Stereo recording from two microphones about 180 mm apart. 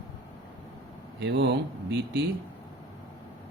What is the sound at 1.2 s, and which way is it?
Speech, 75° right (ahead or behind).